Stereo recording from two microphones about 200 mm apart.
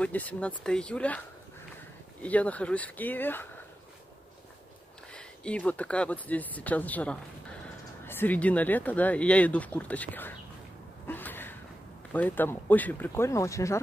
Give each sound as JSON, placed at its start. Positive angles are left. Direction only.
{"t": 0.0, "sound": "speech", "side_deg": 5}
{"t": 2.2, "sound": "speech", "side_deg": 5}
{"t": 5.1, "sound": "speech", "side_deg": 5}
{"t": 11.1, "sound": "a sound", "side_deg": 10}
{"t": 12.1, "sound": "speech", "side_deg": 10}